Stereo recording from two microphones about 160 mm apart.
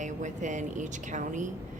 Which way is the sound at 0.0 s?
50° right (ahead or behind).